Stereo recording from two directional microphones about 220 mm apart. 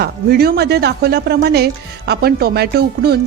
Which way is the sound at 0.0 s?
45° right (ahead or behind).